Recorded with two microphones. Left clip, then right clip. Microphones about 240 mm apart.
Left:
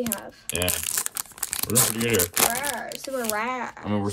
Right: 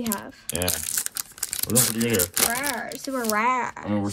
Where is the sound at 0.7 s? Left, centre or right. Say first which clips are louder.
Left 1 dB; left.